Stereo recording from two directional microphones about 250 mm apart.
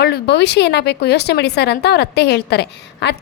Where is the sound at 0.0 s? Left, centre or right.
Left.